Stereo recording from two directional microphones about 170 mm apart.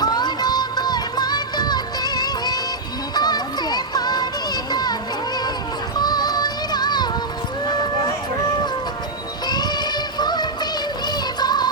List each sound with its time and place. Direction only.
0.0 s music: 25° left (ahead or behind)
4.7 s children playing: 25° left (ahead or behind)
6.0 s music: 25° left (ahead or behind)
9.5 s music: 25° left (ahead or behind)